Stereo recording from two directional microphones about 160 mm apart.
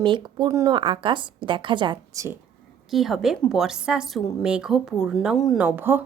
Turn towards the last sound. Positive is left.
turn(degrees=-10)  # may be behind; listen again after turning